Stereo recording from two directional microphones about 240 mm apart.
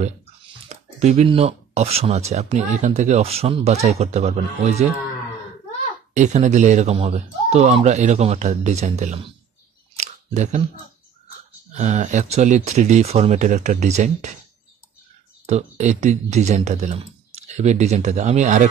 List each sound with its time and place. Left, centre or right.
0.7 s speech: right
6.1 s speech: right
9.9 s a sound: right
11.7 s speech: right
15.4 s speech: right